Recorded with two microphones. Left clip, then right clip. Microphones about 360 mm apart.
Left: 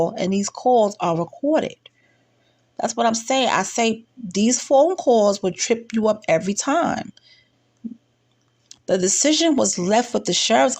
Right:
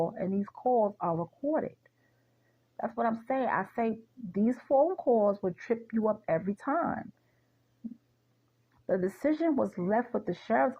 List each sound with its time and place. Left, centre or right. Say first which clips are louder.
0.0 s speech: left 10 dB; right
2.7 s speech: left 11 dB; right
8.9 s speech: left 11 dB; right